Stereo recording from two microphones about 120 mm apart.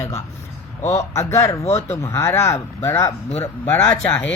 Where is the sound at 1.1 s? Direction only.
25° left (ahead or behind).